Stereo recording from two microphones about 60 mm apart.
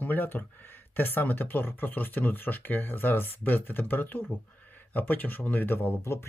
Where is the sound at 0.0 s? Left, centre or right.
Left.